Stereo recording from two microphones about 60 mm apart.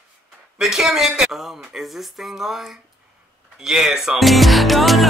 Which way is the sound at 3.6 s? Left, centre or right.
Centre.